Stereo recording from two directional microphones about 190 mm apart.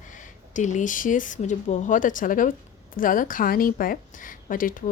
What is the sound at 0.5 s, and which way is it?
A woman's voice, 40° left (ahead or behind).